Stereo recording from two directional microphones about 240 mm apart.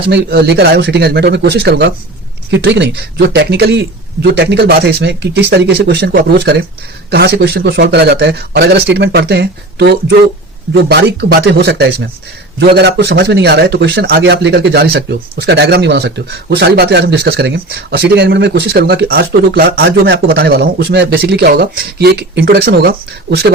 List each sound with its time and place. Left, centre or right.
0.1 s a man's voice: right